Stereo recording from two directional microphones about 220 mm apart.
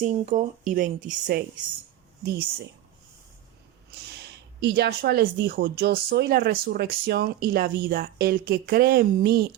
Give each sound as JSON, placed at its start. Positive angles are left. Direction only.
{"t": 0.0, "sound": "speech", "side_deg": -35}
{"t": 4.2, "sound": "speech", "side_deg": -50}